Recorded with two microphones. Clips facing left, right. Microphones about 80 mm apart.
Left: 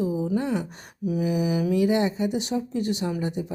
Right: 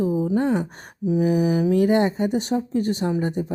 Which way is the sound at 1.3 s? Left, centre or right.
Right.